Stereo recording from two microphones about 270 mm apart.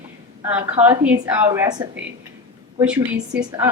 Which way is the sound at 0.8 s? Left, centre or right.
Centre.